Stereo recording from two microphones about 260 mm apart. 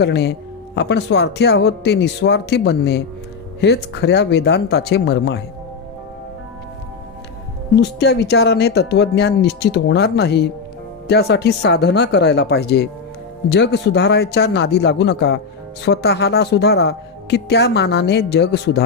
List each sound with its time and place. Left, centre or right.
0.0 s speech: left
7.8 s speech: left